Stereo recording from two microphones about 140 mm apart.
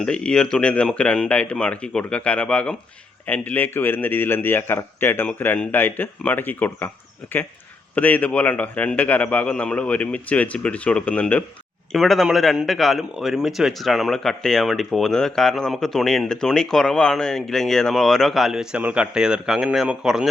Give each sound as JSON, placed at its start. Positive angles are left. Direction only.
{"t": 0.0, "sound": "a man's voice", "side_deg": 5}
{"t": 7.9, "sound": "a man's voice", "side_deg": 10}